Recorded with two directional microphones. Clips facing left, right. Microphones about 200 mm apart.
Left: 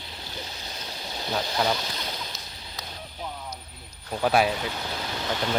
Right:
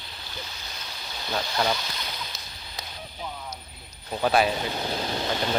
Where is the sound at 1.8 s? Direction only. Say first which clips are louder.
Left 2 dB; 35° left (ahead or behind).